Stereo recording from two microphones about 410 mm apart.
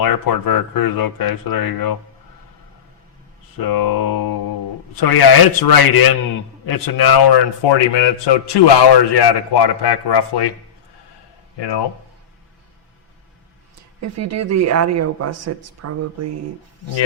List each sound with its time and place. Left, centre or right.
0.0 s speech: left
3.6 s a sound: left
4.9 s a man's voice: left
11.5 s a man's voice: left
14.0 s speech: right